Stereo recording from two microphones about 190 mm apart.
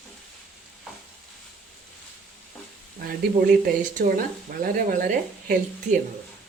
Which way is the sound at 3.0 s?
50° right (ahead or behind).